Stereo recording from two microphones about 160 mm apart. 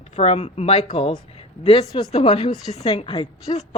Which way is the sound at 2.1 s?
40° left (ahead or behind).